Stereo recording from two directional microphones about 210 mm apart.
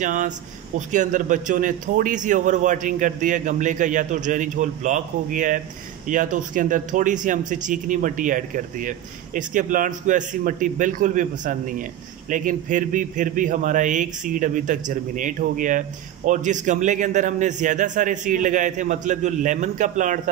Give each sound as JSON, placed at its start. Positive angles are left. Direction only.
{"t": 0.0, "sound": "speech", "side_deg": -40}